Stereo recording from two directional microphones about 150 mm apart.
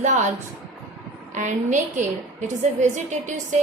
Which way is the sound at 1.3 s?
55° right (ahead or behind).